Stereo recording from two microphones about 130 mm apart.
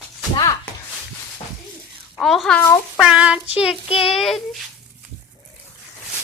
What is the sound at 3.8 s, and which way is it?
Speech, 45° left (ahead or behind).